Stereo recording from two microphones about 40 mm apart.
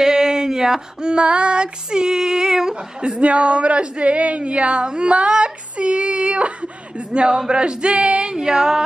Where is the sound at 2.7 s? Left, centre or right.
Right.